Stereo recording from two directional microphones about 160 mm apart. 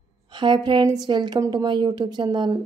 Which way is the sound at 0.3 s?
30° right (ahead or behind).